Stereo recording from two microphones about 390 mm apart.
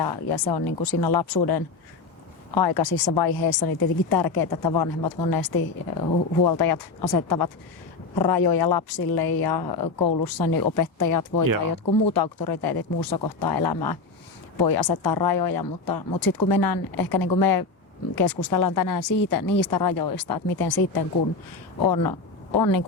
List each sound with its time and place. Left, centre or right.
0.0 s speech: left
8.2 s speech: left
12.0 s speech: left